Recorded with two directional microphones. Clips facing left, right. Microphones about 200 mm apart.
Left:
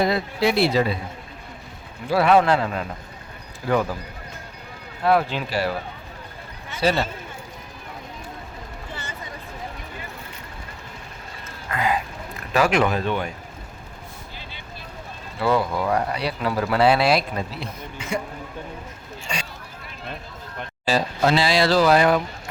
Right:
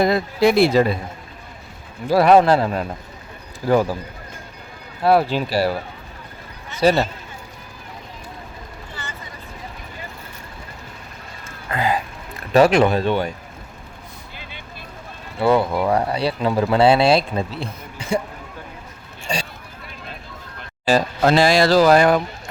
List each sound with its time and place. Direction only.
0.0 s speech: 45° right (ahead or behind)
2.0 s speech: 40° right (ahead or behind)
5.0 s speech: 35° right (ahead or behind)
6.7 s speech: 45° right (ahead or behind)
11.7 s a sound: 30° right (ahead or behind)
12.5 s speech: 30° right (ahead or behind)
15.4 s speech: 25° right (ahead or behind)
19.3 s a sound: 35° right (ahead or behind)
20.8 s speech: 50° right (ahead or behind)